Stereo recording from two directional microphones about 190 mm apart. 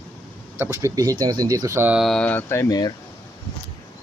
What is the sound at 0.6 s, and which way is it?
Speech, 15° right (ahead or behind).